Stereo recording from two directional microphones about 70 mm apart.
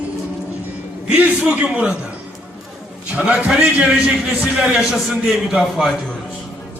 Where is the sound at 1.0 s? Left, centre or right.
Centre.